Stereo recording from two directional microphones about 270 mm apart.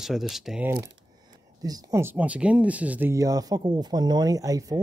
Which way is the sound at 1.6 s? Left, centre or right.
Centre.